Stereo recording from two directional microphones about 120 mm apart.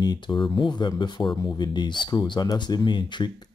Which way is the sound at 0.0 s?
40° left (ahead or behind).